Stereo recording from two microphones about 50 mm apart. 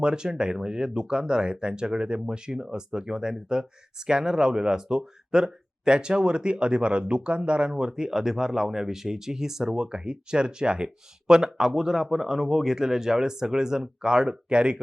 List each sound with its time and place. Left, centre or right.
0.0 s speech: centre